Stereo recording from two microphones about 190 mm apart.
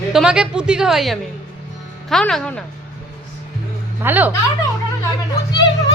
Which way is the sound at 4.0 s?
10° right (ahead or behind).